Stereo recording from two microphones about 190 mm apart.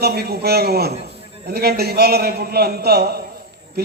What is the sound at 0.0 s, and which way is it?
A man's voice, 55° right (ahead or behind).